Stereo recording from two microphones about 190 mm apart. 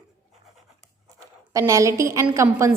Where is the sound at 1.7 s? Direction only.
15° right (ahead or behind).